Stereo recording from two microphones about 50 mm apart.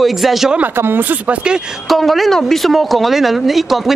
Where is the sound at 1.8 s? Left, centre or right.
Centre.